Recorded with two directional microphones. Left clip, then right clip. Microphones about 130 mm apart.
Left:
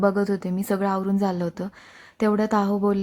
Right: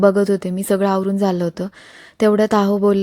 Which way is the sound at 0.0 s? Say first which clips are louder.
Right 8 dB; 30° right (ahead or behind).